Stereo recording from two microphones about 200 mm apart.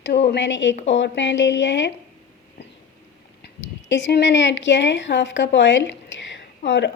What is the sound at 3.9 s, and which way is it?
Speech, 60° left (ahead or behind).